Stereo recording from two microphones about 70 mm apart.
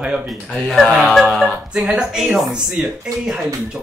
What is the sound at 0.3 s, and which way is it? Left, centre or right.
Speech, centre.